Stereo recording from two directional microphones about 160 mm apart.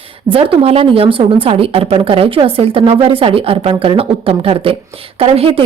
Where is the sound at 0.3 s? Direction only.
35° right (ahead or behind).